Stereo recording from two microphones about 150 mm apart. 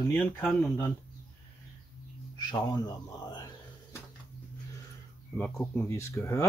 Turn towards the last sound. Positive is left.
turn(degrees=20)  # may be behind; listen again after turning